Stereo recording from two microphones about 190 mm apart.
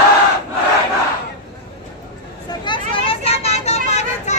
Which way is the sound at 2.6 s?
25° left (ahead or behind).